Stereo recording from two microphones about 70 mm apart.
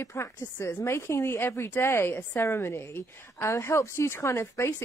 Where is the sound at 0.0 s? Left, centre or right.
Left.